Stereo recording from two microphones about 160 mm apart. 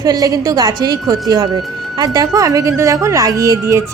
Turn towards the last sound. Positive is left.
turn(degrees=-20)  # may be behind; listen again after turning